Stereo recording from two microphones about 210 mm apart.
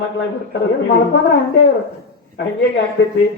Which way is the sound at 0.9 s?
60° left (ahead or behind).